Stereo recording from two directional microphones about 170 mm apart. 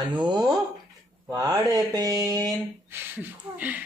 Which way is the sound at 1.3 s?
20° right (ahead or behind).